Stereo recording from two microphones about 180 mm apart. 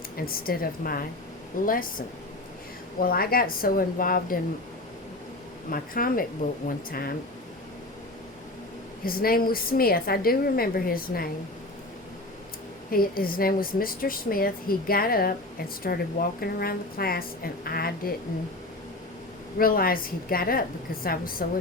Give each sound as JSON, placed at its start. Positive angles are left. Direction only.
{"t": 0.2, "sound": "a woman's voice", "side_deg": 55}
{"t": 5.7, "sound": "a woman's voice", "side_deg": 50}
{"t": 9.0, "sound": "a woman's voice", "side_deg": 55}
{"t": 12.9, "sound": "a woman's voice", "side_deg": 55}
{"t": 19.5, "sound": "a woman's voice", "side_deg": 55}